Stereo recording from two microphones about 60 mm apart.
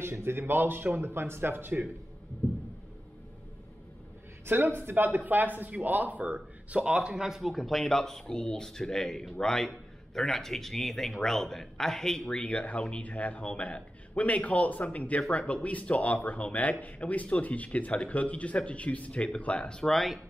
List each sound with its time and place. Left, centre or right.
0.0 s speech: right
4.5 s a man's voice: right; by 20.2 s centre